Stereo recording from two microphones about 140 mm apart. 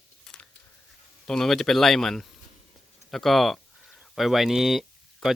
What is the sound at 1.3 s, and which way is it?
Speech, 5° left (ahead or behind).